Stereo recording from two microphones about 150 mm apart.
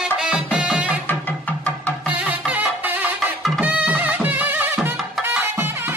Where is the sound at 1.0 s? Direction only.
10° left (ahead or behind).